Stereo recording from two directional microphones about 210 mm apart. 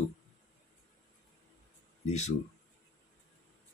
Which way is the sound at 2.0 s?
30° left (ahead or behind).